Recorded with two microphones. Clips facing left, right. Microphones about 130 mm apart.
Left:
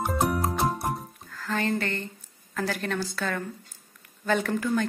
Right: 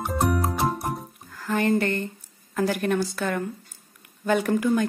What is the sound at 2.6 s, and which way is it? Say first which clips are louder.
Speech: right 6 dB; 15° right (ahead or behind).